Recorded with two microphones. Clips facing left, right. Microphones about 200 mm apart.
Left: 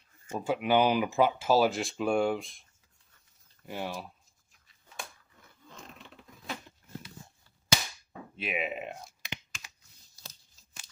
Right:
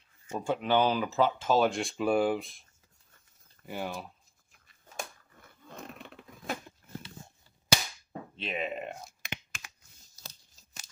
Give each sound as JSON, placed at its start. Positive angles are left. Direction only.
{"t": 0.3, "sound": "speech", "side_deg": 5}
{"t": 3.6, "sound": "speech", "side_deg": 0}
{"t": 4.5, "sound": "a sound", "side_deg": -45}
{"t": 5.7, "sound": "a sound", "side_deg": -55}
{"t": 8.4, "sound": "speech", "side_deg": 10}
{"t": 9.2, "sound": "computer keyboard", "side_deg": -55}